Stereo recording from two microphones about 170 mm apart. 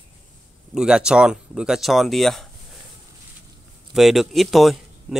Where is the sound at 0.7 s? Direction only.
5° right (ahead or behind).